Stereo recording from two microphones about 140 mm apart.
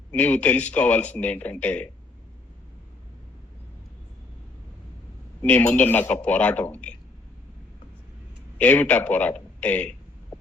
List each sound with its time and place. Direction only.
0.1 s a man's voice: 10° left (ahead or behind)
5.4 s a man's voice: 10° left (ahead or behind)
8.5 s speech: 10° left (ahead or behind)